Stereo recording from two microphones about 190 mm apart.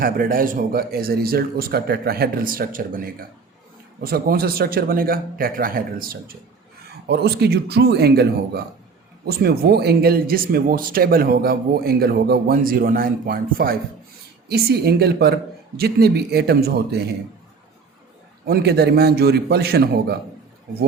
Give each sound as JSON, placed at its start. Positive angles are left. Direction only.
{"t": 0.0, "sound": "a man's voice", "side_deg": -50}
{"t": 18.4, "sound": "a man's voice", "side_deg": -60}